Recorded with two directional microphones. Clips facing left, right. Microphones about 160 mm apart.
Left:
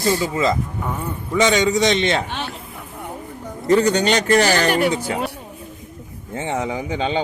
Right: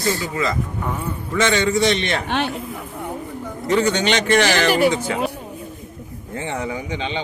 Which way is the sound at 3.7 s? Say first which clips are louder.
Left 3 dB; 40° left (ahead or behind).